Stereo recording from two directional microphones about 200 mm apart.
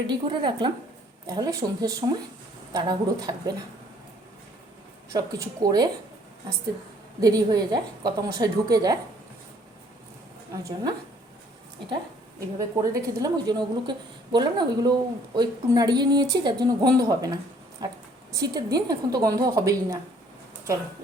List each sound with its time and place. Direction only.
0.1 s a woman's voice: 25° right (ahead or behind)
5.1 s a woman's voice: 20° right (ahead or behind)
7.2 s a woman's voice: 20° right (ahead or behind)
10.5 s a woman's voice: 15° right (ahead or behind)
12.5 s a woman's voice: 15° right (ahead or behind)